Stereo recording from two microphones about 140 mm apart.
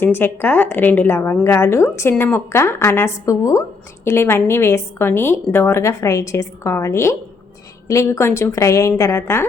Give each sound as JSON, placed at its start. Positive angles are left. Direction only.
{"t": 0.0, "sound": "a woman's voice", "side_deg": 15}